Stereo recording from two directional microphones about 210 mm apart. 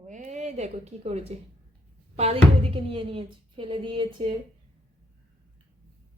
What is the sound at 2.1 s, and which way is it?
A woman's voice, 30° right (ahead or behind).